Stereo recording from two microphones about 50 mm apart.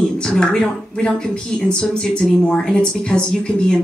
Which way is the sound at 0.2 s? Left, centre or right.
Centre.